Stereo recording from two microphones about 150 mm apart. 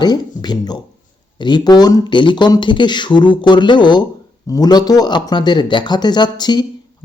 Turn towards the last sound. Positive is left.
turn(degrees=30)  # may be behind; listen again after turning